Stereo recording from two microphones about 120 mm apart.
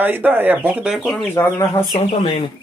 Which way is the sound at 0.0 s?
15° right (ahead or behind).